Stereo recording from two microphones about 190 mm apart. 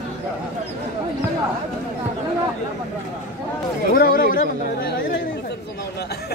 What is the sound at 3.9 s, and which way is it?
Speech, 50° left (ahead or behind).